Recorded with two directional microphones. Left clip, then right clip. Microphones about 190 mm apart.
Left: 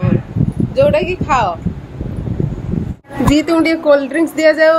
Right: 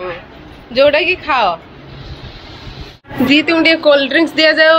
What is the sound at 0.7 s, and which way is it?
Speech, 10° left (ahead or behind).